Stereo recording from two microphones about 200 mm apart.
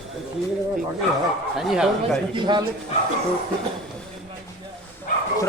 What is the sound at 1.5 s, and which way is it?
Speech, centre (ahead or behind).